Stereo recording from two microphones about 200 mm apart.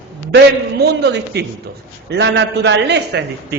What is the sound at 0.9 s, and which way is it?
A man's voice, 55° right (ahead or behind).